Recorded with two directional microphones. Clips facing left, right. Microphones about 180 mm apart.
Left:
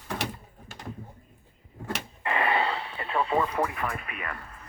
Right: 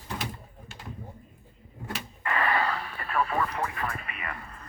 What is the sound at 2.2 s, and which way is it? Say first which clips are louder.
Radio: left 1 dB; 25° left (ahead or behind).